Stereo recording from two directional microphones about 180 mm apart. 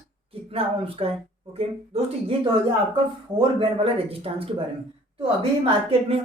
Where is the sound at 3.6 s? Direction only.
30° right (ahead or behind).